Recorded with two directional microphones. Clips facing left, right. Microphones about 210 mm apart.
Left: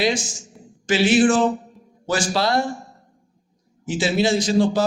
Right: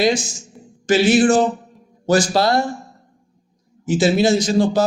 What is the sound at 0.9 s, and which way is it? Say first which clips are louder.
A man's voice: right 3 dB; 40° right (ahead or behind).